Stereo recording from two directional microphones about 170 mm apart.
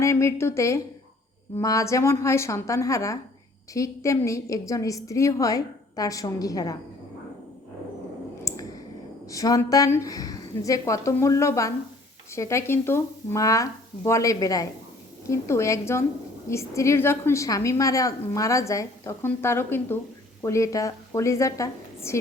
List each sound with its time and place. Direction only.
0.0 s a woman's voice: 15° left (ahead or behind)
8.5 s clicking: 20° left (ahead or behind)
9.3 s a woman's voice: 20° left (ahead or behind)